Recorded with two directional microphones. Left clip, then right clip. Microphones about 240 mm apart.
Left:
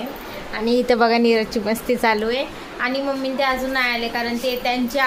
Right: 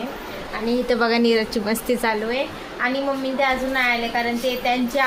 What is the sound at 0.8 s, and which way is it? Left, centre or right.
A woman's voice, centre.